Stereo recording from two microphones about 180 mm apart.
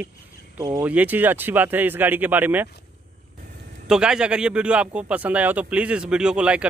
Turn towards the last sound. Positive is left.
turn(degrees=-5)  # may be behind; listen again after turning